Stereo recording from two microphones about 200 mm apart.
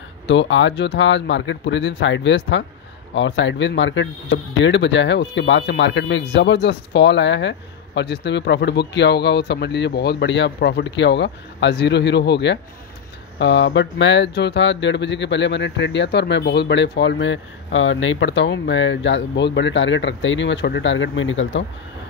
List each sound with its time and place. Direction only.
0.3 s speech: 65° left (ahead or behind)